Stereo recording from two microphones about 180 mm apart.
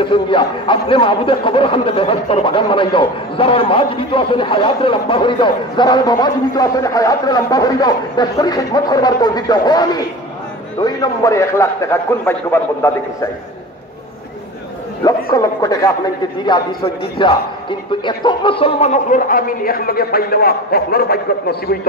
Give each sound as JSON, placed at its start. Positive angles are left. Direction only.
{"t": 0.0, "sound": "a man's voice", "side_deg": 25}
{"t": 15.3, "sound": "a man's voice", "side_deg": 20}